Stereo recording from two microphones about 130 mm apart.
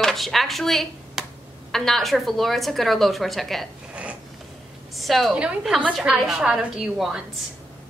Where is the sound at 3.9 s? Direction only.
10° right (ahead or behind).